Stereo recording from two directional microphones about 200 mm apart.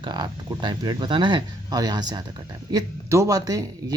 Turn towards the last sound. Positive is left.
turn(degrees=-20)  # may be behind; listen again after turning